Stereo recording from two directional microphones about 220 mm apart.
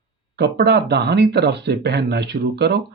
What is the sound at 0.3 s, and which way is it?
Speech, 50° right (ahead or behind).